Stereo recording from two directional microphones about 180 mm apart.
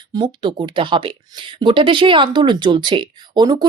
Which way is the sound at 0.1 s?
25° right (ahead or behind).